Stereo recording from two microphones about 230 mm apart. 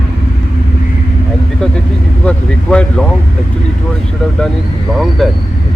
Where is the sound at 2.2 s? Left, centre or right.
Centre.